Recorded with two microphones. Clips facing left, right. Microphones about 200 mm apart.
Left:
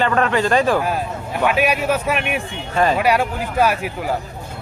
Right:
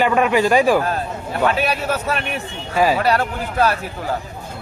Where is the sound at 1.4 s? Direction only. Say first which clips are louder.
Left 1 dB; 10° left (ahead or behind).